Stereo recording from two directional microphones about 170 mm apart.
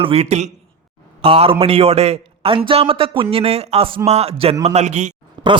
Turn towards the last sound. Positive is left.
turn(degrees=-25)  # may be behind; listen again after turning